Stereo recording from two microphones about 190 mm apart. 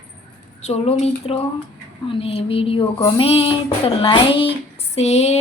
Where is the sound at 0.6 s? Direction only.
35° left (ahead or behind).